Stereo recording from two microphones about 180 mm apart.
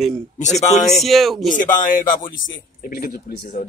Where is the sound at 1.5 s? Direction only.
45° left (ahead or behind).